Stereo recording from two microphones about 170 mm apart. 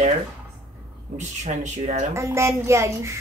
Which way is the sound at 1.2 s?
45° right (ahead or behind).